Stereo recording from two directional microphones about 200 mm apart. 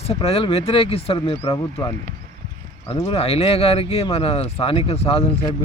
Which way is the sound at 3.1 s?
30° left (ahead or behind).